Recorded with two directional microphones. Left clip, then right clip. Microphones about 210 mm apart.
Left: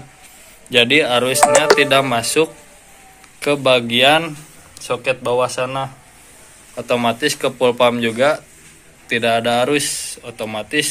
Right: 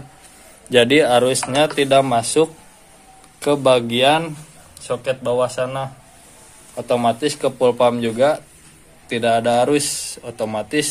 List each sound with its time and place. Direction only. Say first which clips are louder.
0.7 s a man's voice: even; 30° right (ahead or behind)
1.8 s a man's voice: left 1 dB; 10° right (ahead or behind)
4.8 s speech: left 2 dB; 5° left (ahead or behind)
6.7 s a man's voice: even; 10° right (ahead or behind); by 10.9 s 25° right (ahead or behind)